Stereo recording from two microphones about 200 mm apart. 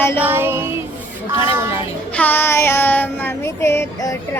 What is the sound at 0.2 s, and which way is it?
Music, 10° right (ahead or behind).